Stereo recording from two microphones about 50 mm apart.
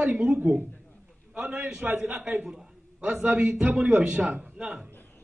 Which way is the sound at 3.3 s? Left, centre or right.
Right.